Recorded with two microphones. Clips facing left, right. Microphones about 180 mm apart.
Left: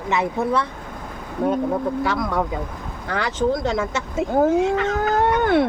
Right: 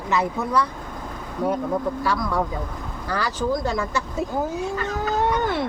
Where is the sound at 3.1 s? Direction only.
20° left (ahead or behind).